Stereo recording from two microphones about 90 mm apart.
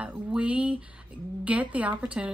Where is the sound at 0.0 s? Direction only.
15° right (ahead or behind).